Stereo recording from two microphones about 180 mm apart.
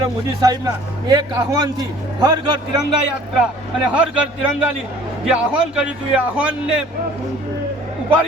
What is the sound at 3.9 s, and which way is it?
Speech, 5° right (ahead or behind).